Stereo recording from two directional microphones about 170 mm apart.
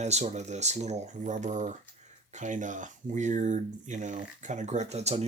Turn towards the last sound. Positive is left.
turn(degrees=-40)  # may be behind; listen again after turning